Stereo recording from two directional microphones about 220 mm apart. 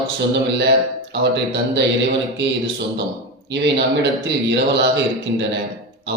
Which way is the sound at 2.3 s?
50° right (ahead or behind).